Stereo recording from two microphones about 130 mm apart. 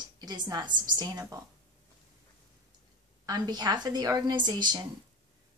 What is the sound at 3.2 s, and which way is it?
A woman's voice, 30° right (ahead or behind).